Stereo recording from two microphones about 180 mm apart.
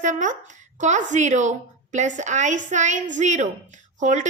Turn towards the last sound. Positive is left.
turn(degrees=-40)  # may be behind; listen again after turning